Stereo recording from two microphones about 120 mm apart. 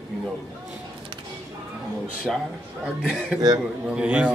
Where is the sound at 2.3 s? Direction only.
5° right (ahead or behind).